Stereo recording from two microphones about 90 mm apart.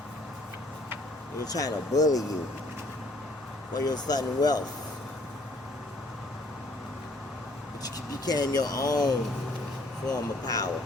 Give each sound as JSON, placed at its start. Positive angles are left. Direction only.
{"t": 1.5, "sound": "speech", "side_deg": 40}
{"t": 3.8, "sound": "speech", "side_deg": 50}
{"t": 8.2, "sound": "speech", "side_deg": 45}